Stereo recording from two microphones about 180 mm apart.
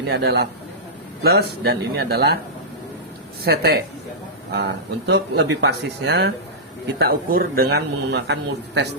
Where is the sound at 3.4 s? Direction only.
60° right (ahead or behind).